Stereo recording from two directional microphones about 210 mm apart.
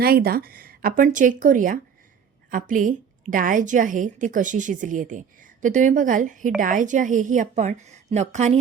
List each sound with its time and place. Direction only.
0.0 s a woman's voice: 45° right (ahead or behind)